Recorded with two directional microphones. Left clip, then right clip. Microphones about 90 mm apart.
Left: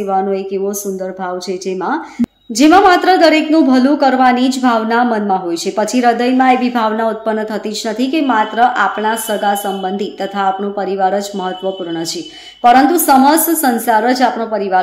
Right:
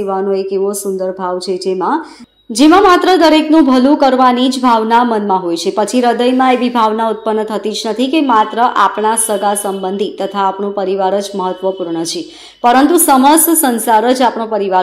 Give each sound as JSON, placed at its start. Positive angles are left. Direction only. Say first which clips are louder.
{"t": 0.0, "sound": "a woman's voice", "louder": "right 1 dB", "side_deg": -25}